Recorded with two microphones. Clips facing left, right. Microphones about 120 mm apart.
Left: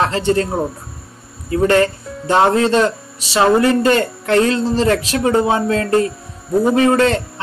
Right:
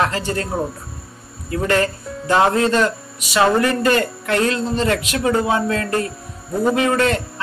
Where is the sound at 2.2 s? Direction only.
30° left (ahead or behind).